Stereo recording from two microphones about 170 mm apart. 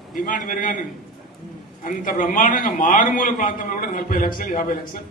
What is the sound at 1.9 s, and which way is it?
A man's voice, 50° left (ahead or behind).